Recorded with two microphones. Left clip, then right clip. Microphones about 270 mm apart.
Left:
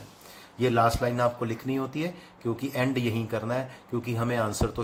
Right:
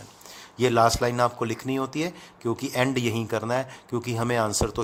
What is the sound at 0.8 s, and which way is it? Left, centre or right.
Speech, right.